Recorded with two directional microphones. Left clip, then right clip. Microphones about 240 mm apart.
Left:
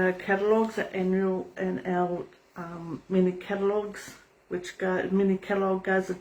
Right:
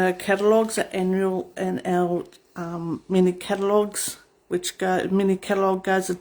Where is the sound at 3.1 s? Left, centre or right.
Right.